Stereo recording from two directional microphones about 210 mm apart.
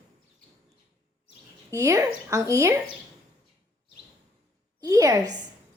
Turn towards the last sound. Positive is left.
turn(degrees=-15)  # may be behind; listen again after turning